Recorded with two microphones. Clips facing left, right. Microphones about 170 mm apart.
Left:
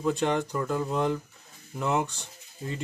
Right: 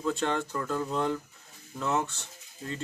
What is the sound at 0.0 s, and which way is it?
Speech, 15° left (ahead or behind).